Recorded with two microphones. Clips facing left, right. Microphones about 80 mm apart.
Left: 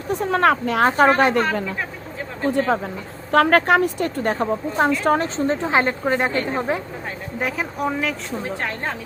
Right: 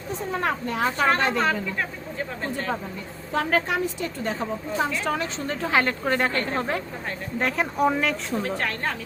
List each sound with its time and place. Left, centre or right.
0.1 s speech: left
0.9 s a woman's voice: left
2.5 s speech: left
3.3 s a woman's voice: left
5.5 s a woman's voice: left
7.3 s speech: centre
8.4 s a woman's voice: left